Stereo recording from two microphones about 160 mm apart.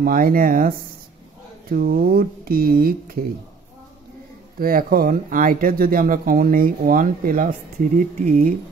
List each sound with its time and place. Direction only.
0.0 s speech: 60° right (ahead or behind)
4.6 s speech: 65° right (ahead or behind)